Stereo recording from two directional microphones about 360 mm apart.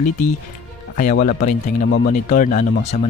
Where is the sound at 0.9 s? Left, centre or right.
Left.